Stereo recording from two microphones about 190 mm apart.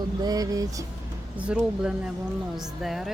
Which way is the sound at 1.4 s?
5° right (ahead or behind).